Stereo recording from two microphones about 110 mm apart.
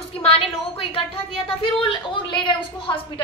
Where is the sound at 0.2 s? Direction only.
60° left (ahead or behind).